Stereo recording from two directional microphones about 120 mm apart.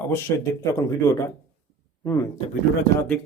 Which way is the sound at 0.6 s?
25° left (ahead or behind).